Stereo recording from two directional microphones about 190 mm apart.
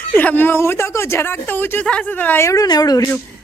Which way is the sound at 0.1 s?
10° left (ahead or behind).